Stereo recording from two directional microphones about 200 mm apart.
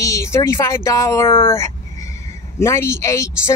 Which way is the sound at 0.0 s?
15° left (ahead or behind).